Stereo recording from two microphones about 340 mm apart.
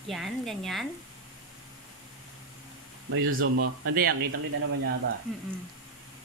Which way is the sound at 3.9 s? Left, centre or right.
Right.